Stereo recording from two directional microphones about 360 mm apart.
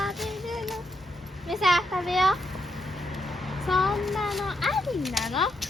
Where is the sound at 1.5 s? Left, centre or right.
Centre.